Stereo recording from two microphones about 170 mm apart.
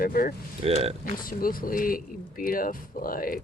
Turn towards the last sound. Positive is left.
turn(degrees=55)  # may be behind; listen again after turning